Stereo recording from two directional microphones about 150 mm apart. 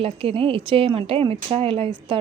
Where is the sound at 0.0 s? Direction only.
40° right (ahead or behind).